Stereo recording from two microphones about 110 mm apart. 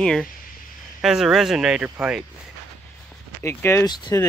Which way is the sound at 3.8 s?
40° left (ahead or behind).